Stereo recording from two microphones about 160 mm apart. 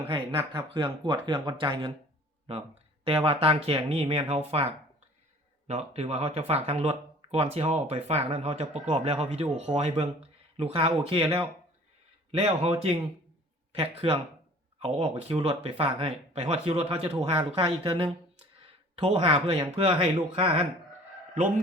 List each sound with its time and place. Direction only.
0.1 s speech: 30° right (ahead or behind)
12.4 s speech: 40° right (ahead or behind)